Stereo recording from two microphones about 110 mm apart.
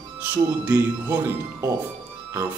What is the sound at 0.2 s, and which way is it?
Speech, 15° right (ahead or behind).